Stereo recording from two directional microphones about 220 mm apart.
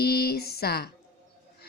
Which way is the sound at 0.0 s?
45° left (ahead or behind).